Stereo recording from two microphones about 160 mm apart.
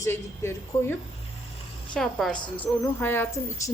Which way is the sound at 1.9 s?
5° left (ahead or behind).